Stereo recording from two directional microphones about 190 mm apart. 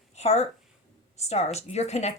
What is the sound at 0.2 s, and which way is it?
A woman's voice, 35° left (ahead or behind).